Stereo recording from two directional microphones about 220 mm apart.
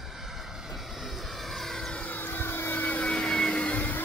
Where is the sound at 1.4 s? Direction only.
Centre (ahead or behind).